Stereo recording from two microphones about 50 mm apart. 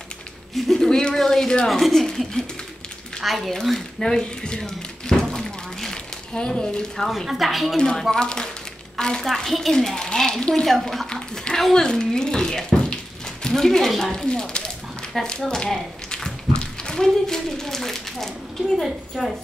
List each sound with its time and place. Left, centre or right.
0.6 s a woman's voice: centre
4.0 s a sound: centre
7.1 s speech: centre
7.7 s a woman's voice: centre
11.7 s a sound: centre
13.5 s speech: centre
14.3 s a woman's voice: centre
15.7 s tap: centre
16.5 s speech: centre